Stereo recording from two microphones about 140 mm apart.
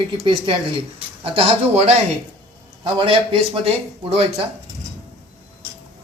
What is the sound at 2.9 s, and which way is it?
Speech, 40° right (ahead or behind).